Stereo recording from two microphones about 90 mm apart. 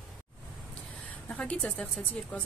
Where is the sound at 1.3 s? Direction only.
15° left (ahead or behind).